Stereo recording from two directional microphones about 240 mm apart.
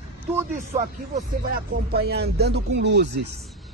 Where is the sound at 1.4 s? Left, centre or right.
Right.